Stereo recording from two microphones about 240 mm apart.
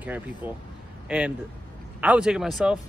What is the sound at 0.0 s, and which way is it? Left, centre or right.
A man's voice, centre.